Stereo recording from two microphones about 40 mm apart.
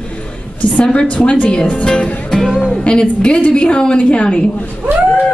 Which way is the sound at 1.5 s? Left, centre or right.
Left.